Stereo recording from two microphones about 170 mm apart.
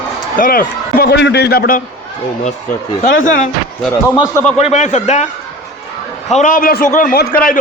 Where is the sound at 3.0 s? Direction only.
50° left (ahead or behind).